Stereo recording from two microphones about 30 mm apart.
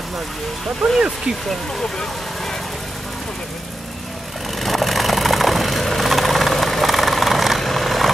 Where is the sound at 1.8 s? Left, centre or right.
Centre.